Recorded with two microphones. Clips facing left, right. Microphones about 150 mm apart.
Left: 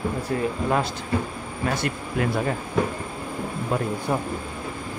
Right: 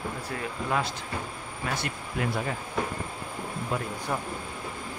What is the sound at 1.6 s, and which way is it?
Speech, 60° left (ahead or behind).